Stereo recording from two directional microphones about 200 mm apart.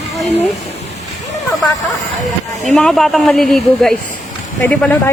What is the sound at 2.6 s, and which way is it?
A woman's voice, centre (ahead or behind).